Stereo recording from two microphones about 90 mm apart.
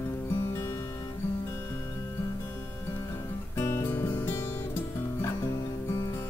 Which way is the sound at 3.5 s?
30° left (ahead or behind).